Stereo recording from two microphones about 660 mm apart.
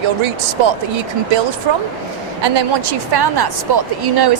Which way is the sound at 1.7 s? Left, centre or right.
Right.